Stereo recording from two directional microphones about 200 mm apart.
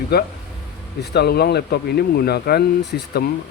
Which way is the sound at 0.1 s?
50° left (ahead or behind).